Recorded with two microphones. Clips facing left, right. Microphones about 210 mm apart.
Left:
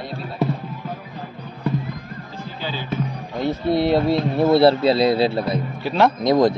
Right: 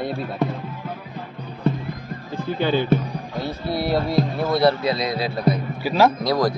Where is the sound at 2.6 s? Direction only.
60° right (ahead or behind).